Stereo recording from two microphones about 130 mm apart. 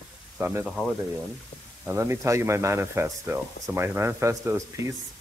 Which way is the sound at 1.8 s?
20° right (ahead or behind).